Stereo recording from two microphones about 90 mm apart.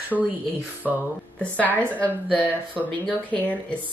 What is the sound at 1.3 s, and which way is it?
Speech, 15° left (ahead or behind).